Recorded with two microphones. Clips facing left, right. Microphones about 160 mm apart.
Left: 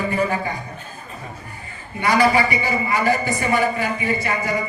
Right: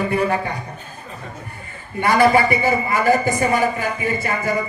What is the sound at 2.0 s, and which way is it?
A man's voice, 50° right (ahead or behind).